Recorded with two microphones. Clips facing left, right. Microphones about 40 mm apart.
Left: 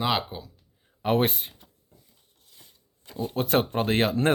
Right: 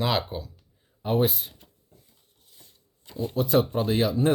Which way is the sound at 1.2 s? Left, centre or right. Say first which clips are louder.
Right 1 dB; left.